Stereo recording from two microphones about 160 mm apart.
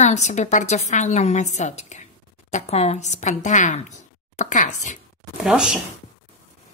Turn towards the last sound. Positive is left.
turn(degrees=-5)  # may be behind; listen again after turning